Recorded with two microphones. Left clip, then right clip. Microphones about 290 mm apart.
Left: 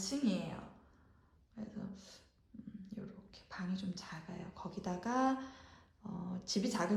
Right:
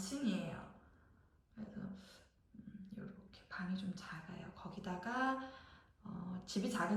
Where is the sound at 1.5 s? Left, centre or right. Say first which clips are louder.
Left 3 dB; centre.